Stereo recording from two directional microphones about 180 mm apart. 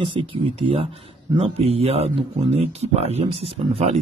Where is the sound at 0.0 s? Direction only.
30° right (ahead or behind).